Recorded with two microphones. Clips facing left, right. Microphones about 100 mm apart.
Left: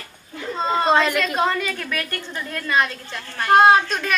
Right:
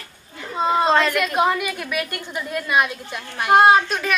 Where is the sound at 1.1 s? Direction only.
10° right (ahead or behind).